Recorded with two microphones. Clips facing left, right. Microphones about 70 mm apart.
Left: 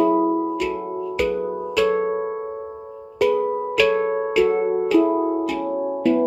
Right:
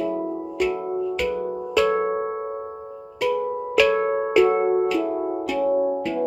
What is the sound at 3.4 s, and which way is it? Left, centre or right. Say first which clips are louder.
Music: left 4 dB; left.